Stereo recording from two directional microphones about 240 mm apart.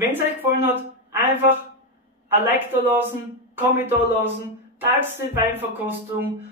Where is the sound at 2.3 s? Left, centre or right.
Centre.